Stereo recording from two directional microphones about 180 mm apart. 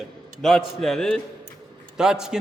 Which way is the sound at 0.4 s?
Centre (ahead or behind).